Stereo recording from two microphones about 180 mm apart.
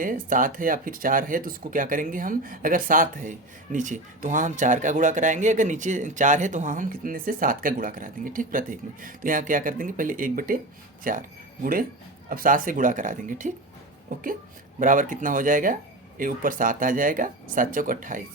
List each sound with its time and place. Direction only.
0.0 s speech: 50° right (ahead or behind)
14.8 s speech: 45° right (ahead or behind)